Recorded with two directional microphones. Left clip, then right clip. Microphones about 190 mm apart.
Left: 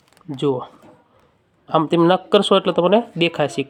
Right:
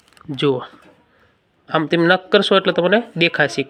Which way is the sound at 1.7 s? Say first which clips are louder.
Even; 10° left (ahead or behind).